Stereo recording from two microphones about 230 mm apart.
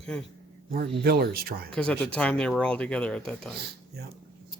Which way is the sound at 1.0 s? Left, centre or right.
Right.